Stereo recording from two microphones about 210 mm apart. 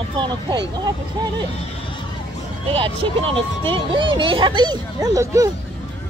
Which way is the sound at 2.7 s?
25° right (ahead or behind).